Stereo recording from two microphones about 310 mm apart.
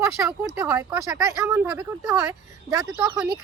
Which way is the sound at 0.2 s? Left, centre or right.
Centre.